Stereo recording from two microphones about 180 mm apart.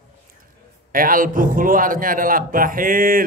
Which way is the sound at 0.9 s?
50° right (ahead or behind).